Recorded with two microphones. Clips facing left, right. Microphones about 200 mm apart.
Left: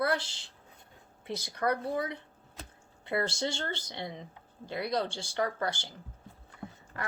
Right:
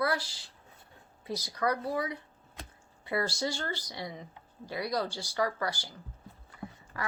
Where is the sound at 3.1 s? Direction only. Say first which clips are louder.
Even; 25° left (ahead or behind).